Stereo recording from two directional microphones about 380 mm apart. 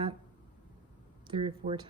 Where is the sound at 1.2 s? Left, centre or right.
Centre.